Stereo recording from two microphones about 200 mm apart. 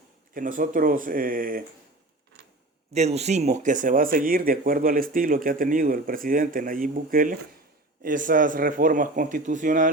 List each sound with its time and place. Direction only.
0.3 s speech: 45° right (ahead or behind)
2.9 s speech: 35° right (ahead or behind)